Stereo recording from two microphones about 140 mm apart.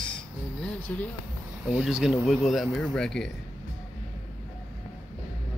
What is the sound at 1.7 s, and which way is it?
Speech, 5° right (ahead or behind).